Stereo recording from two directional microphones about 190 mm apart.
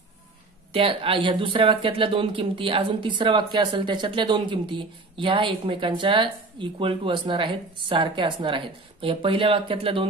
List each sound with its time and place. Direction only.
0.7 s speech: 30° right (ahead or behind)